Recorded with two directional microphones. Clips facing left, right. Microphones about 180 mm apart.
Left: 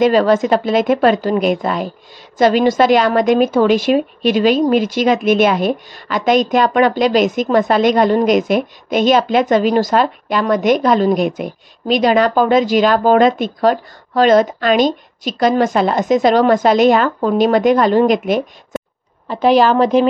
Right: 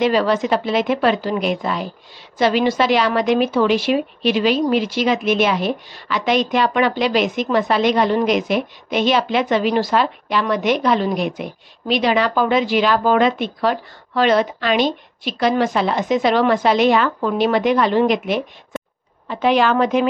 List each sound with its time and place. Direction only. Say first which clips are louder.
0.0 s a woman's voice: left 5 dB; 45° left (ahead or behind)